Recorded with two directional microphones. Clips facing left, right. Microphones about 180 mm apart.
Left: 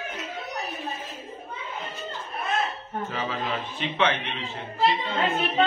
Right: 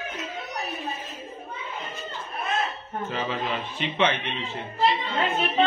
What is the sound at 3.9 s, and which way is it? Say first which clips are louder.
Speech: right 1 dB; centre (ahead or behind).